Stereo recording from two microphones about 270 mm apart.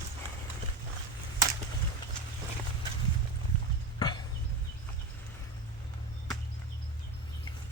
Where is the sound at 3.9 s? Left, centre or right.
Centre.